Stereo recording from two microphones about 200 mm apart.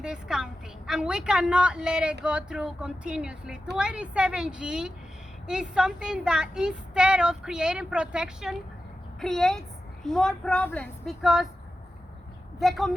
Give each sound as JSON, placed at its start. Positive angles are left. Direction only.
{"t": 0.0, "sound": "speech", "side_deg": -5}
{"t": 12.5, "sound": "speech", "side_deg": 0}